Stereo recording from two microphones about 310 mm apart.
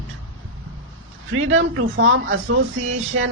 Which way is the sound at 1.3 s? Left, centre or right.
Right.